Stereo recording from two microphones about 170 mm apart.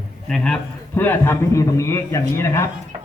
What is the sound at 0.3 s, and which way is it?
A man's voice, 5° left (ahead or behind).